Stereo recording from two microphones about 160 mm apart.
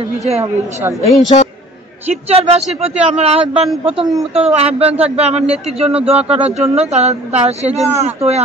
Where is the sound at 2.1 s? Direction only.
40° right (ahead or behind).